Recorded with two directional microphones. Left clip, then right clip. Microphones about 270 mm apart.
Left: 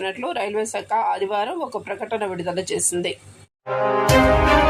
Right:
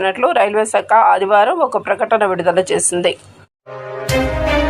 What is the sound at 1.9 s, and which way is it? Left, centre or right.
A woman's voice, centre.